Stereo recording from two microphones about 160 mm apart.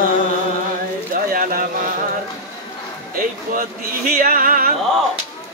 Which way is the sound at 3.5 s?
60° right (ahead or behind).